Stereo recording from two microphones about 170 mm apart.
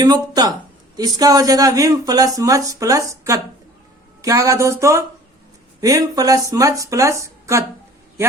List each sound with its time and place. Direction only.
0.0 s speech: 25° right (ahead or behind)